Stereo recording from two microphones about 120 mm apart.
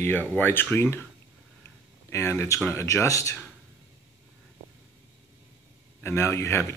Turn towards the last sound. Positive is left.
turn(degrees=20)  # may be behind; listen again after turning